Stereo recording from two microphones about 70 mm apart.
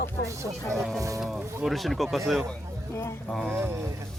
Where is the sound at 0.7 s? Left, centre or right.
Centre.